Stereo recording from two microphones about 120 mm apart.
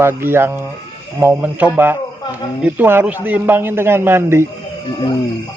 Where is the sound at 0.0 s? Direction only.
20° right (ahead or behind).